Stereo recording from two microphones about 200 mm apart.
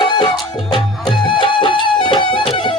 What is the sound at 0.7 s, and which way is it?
Music, 25° left (ahead or behind).